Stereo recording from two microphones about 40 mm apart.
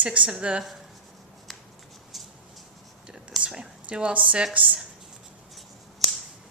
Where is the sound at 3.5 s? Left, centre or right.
Right.